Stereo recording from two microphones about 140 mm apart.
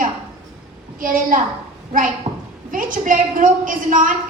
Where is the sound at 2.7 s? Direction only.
75° right (ahead or behind).